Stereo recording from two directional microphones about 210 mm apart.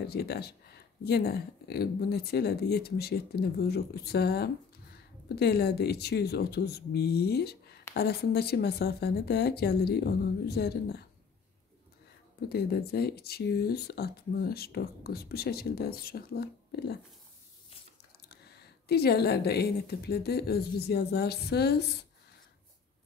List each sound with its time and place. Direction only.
0.0 s speech: 50° left (ahead or behind)
12.4 s speech: 50° left (ahead or behind)
18.3 s speech: 50° left (ahead or behind)